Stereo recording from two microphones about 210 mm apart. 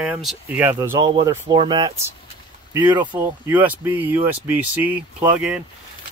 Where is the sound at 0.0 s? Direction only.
5° right (ahead or behind); by 3.2 s 20° right (ahead or behind).